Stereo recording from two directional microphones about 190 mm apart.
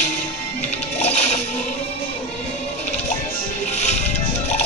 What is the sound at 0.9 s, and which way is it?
Music, 35° left (ahead or behind).